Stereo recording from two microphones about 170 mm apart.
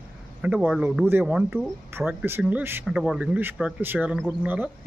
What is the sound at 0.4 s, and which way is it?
Speech, 10° right (ahead or behind).